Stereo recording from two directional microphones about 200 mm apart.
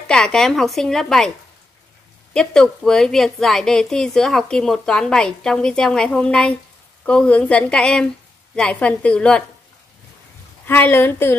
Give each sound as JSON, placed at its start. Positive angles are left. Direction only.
{"t": 0.1, "sound": "a woman's voice", "side_deg": 5}
{"t": 2.3, "sound": "a woman's voice", "side_deg": 5}
{"t": 10.7, "sound": "a woman's voice", "side_deg": 10}